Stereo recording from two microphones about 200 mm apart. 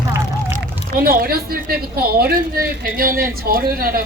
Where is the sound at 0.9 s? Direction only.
50° right (ahead or behind).